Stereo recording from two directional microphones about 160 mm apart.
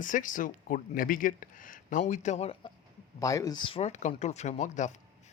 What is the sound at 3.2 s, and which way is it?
Speech, 20° left (ahead or behind).